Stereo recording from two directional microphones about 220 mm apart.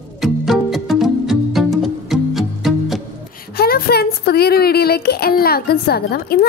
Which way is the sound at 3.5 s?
45° left (ahead or behind).